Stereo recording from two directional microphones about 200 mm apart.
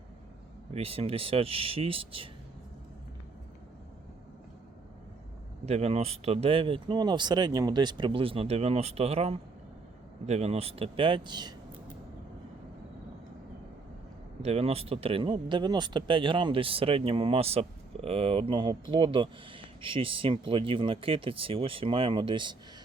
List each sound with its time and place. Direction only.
0.7 s speech: 30° right (ahead or behind)
5.6 s speech: 30° right (ahead or behind)
14.4 s speech: 30° right (ahead or behind)